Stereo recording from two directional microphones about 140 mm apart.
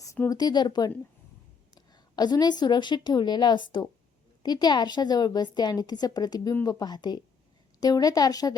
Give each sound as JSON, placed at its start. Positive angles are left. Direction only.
{"t": 0.0, "sound": "a woman's voice", "side_deg": 20}